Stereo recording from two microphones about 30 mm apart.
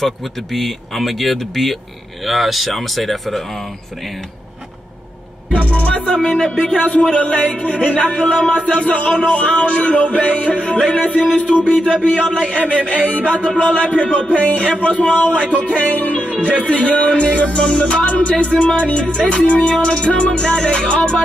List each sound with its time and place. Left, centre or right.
0.0 s speech: centre
5.6 s music: left
5.9 s music: left
17.1 s music: left
18.5 s music: left
19.2 s music: left